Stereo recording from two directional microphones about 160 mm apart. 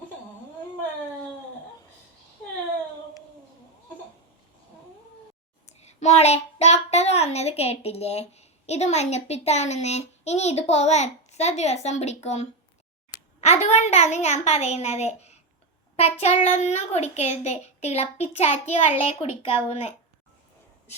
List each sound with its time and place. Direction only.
5.8 s a child's voice: 45° left (ahead or behind)